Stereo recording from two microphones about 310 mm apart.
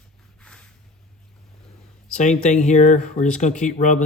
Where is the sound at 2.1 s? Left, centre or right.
Left.